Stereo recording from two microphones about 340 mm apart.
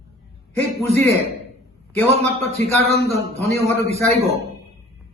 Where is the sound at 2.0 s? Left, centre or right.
Centre.